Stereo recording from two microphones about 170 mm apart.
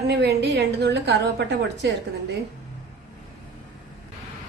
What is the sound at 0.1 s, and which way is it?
A woman's voice, 80° right.